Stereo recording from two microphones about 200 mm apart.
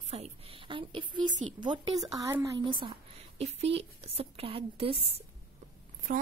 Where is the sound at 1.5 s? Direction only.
25° right (ahead or behind).